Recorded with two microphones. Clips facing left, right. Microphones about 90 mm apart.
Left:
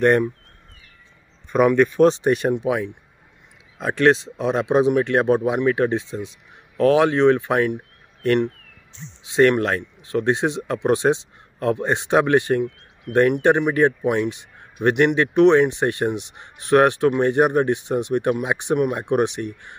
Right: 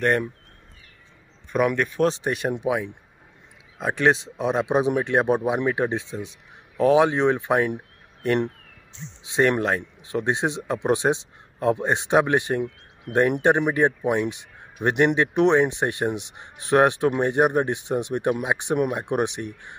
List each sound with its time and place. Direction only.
1.7 s speech: centre (ahead or behind)
2.5 s speech: 15° right (ahead or behind)
9.2 s speech: 20° right (ahead or behind)
13.1 s speech: 35° right (ahead or behind)
13.4 s speech: 15° right (ahead or behind)